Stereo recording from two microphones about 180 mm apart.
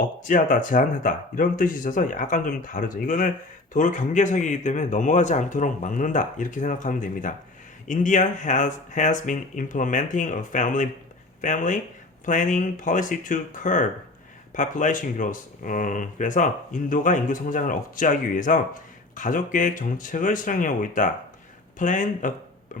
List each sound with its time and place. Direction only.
0.3 s speech: 45° left (ahead or behind)